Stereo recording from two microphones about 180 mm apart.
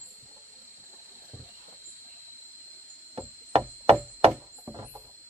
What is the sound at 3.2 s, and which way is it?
Knock, 35° right (ahead or behind).